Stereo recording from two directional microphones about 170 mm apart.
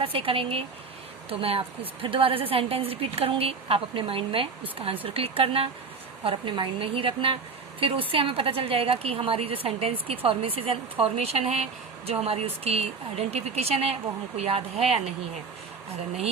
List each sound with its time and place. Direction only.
0.0 s speech: 35° right (ahead or behind)